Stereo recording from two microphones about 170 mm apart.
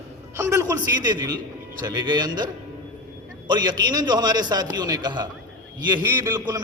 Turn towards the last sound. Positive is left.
turn(degrees=-25)  # may be behind; listen again after turning